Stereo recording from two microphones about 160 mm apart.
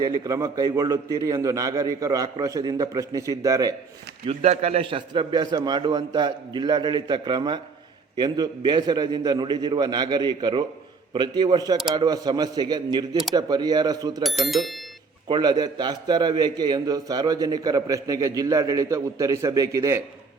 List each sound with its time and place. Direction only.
0.0 s a man's voice: 20° right (ahead or behind)
4.3 s a man's voice: 40° right (ahead or behind); by 14.3 s 25° right (ahead or behind)
14.3 s speech: centre (ahead or behind)
15.3 s a man's voice: 25° right (ahead or behind)